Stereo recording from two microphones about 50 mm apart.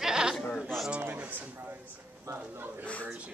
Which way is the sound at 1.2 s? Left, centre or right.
Right.